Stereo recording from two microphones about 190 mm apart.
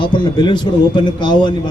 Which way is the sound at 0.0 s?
25° left (ahead or behind).